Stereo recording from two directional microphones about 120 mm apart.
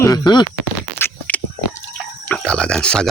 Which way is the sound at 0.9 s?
15° left (ahead or behind).